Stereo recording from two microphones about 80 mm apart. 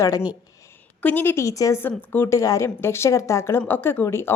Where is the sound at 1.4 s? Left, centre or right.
Left.